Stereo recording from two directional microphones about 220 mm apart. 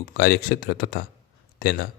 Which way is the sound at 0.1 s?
45° left (ahead or behind).